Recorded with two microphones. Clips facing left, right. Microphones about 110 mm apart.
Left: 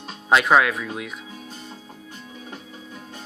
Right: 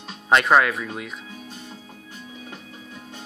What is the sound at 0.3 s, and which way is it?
Speech, centre (ahead or behind).